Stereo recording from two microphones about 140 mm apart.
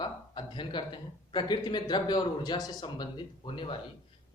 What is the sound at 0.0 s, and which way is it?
Speech, 35° left (ahead or behind).